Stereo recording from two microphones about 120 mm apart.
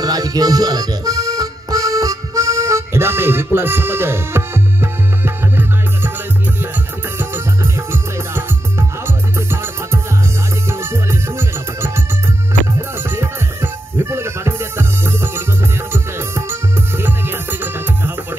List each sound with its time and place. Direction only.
0.0 s music: 30° right (ahead or behind)
7.2 s music: 20° right (ahead or behind)
13.0 s music: 20° right (ahead or behind)